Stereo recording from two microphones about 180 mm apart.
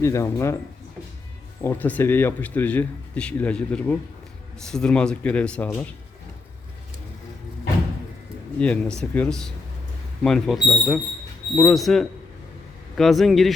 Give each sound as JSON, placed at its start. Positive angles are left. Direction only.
{"t": 0.0, "sound": "speech", "side_deg": 15}
{"t": 1.6, "sound": "speech", "side_deg": 10}
{"t": 8.5, "sound": "speech", "side_deg": 5}